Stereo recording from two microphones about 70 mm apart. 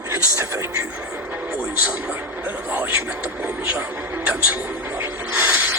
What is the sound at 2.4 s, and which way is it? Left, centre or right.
Music, right.